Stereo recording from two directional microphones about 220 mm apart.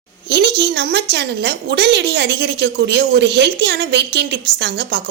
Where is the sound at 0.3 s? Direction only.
50° right (ahead or behind).